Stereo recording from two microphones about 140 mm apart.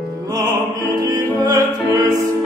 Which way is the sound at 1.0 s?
25° right (ahead or behind).